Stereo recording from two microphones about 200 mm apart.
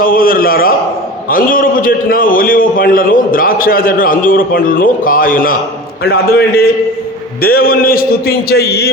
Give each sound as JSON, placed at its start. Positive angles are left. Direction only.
{"t": 0.0, "sound": "a man's voice", "side_deg": 45}